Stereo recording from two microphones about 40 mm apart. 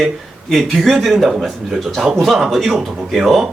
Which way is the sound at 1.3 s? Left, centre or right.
Centre.